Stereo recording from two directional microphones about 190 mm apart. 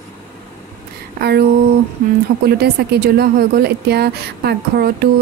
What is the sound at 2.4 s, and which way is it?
A woman's voice, 55° right (ahead or behind).